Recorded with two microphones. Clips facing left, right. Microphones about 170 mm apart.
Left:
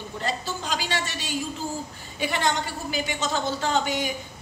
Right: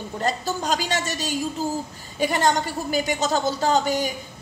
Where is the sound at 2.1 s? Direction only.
40° right (ahead or behind).